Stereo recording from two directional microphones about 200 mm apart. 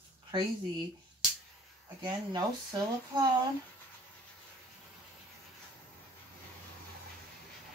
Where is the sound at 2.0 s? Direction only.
20° right (ahead or behind).